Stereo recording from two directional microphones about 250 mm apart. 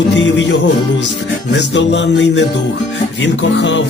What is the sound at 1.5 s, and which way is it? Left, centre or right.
Speech, left.